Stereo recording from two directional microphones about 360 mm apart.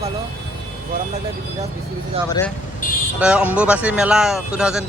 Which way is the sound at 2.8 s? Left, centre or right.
Left.